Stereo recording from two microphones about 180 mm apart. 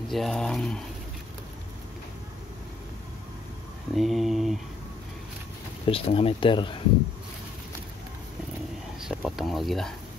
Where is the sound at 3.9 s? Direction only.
Centre (ahead or behind).